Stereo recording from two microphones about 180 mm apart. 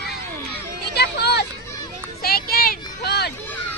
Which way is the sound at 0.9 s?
65° left (ahead or behind).